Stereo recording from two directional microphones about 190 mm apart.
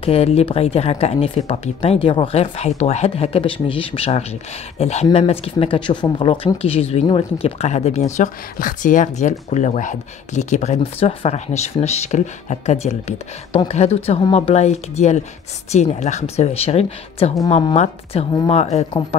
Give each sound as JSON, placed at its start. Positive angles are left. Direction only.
{"t": 0.0, "sound": "speech", "side_deg": 30}